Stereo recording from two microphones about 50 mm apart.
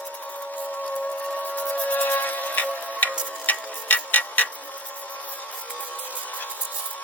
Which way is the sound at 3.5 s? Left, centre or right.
Left.